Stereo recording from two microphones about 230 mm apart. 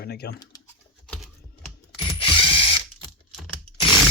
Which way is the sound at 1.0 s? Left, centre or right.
Centre.